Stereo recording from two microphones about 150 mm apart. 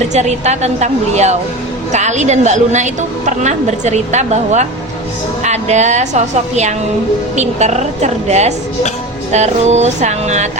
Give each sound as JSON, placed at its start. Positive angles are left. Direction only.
{"t": 0.1, "sound": "a woman's voice", "side_deg": -50}